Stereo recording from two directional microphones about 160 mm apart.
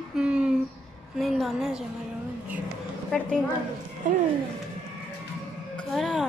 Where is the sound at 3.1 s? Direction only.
5° left (ahead or behind).